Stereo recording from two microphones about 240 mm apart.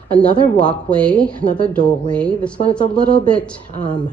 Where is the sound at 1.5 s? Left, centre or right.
Right.